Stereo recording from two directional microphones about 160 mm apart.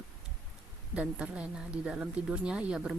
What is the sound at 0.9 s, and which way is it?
Speech, 10° right (ahead or behind).